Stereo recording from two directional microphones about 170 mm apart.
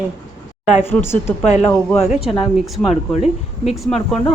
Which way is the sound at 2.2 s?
Centre (ahead or behind).